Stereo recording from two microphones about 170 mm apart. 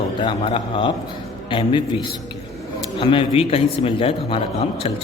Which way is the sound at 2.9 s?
30° left (ahead or behind).